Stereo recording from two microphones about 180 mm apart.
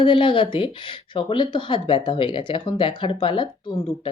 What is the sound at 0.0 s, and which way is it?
Speech, 30° left (ahead or behind).